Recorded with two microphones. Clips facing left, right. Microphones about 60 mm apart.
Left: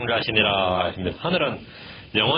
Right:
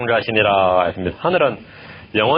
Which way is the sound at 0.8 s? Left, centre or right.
Right.